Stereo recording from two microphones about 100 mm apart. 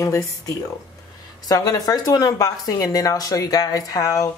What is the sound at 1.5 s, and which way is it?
Speech, 40° left (ahead or behind).